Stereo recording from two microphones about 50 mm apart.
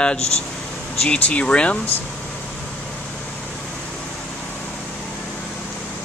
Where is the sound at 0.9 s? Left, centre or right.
Centre.